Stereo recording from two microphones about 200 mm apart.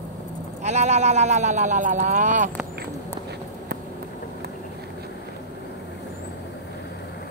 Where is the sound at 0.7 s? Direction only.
35° right (ahead or behind).